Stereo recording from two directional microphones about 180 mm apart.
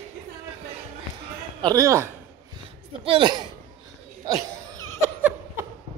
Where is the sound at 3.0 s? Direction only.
30° right (ahead or behind).